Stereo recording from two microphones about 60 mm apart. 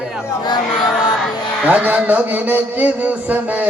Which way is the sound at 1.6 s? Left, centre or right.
Right.